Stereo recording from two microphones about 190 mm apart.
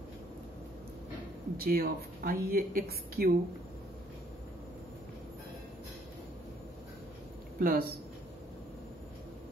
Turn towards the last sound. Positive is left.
turn(degrees=-50)  # may be behind; listen again after turning